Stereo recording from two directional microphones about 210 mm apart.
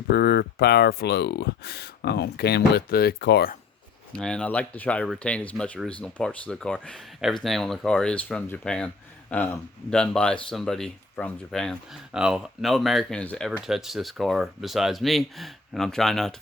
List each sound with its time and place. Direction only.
0.1 s speech: 50° left (ahead or behind)
4.2 s speech: 5° left (ahead or behind)